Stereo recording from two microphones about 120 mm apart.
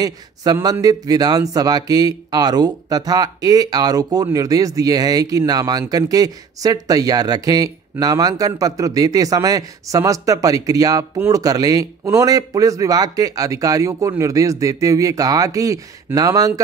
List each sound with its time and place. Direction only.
0.0 s speech: 30° right (ahead or behind)